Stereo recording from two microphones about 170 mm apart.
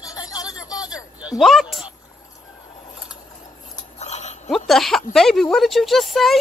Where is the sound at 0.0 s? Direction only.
20° left (ahead or behind).